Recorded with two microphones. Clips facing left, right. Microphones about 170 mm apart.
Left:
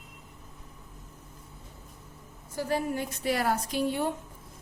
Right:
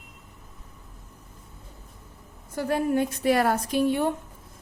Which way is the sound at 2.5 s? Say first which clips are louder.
Right 5 dB; 60° right (ahead or behind).